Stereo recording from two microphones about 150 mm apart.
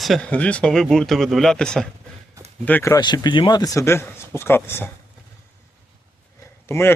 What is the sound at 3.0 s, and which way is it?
Speech, 30° left (ahead or behind).